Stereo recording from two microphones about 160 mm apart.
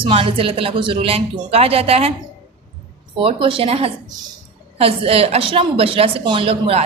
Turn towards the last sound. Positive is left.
turn(degrees=-35)  # may be behind; listen again after turning